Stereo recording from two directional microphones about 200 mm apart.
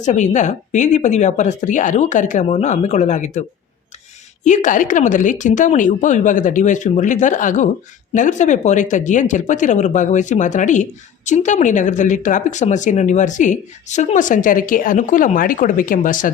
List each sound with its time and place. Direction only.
0.0 s speech: 35° left (ahead or behind)
4.4 s speech: 40° left (ahead or behind)